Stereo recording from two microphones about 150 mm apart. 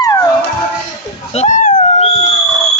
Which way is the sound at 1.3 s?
50° left (ahead or behind).